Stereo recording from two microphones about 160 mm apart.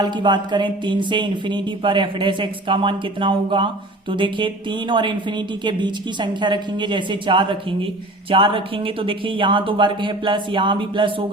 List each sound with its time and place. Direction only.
0.0 s speech: 30° right (ahead or behind)